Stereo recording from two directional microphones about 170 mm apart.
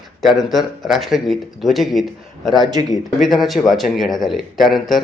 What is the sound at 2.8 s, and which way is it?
Speech, 20° right (ahead or behind).